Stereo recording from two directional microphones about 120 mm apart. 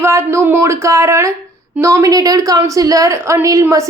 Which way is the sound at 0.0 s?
25° right (ahead or behind).